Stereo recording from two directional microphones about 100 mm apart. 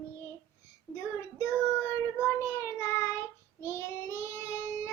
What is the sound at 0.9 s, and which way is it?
Child singing, 30° left (ahead or behind).